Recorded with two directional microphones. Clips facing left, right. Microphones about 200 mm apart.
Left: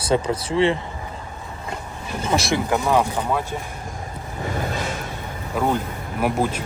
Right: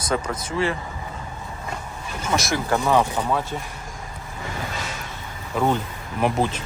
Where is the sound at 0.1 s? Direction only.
30° left (ahead or behind).